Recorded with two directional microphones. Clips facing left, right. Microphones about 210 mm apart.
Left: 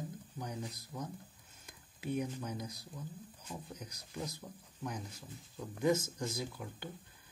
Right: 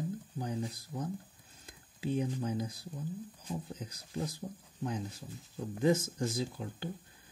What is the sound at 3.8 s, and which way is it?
Speech, 30° right (ahead or behind).